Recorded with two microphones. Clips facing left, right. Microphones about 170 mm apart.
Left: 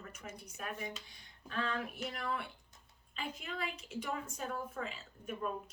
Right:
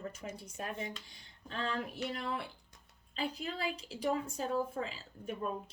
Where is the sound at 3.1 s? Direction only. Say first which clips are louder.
Right 5 dB; 35° right (ahead or behind).